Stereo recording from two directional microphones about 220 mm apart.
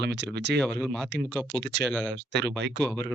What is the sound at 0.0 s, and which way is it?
Speech, 50° right (ahead or behind).